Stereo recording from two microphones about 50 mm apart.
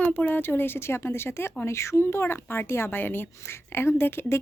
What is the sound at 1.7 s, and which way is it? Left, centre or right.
Speech, left.